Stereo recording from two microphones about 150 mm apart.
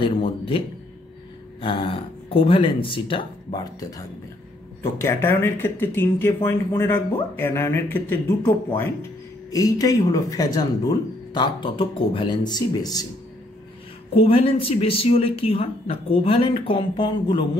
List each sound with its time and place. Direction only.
0.0 s a woman's voice: 35° left (ahead or behind)
5.0 s speech: 15° left (ahead or behind)
14.1 s a woman's voice: 40° left (ahead or behind)